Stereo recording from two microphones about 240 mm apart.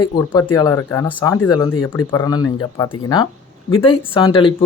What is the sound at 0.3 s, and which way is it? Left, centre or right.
Speech, centre.